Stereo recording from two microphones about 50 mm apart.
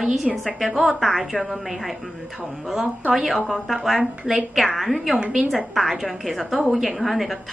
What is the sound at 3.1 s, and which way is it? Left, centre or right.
A woman's voice, centre.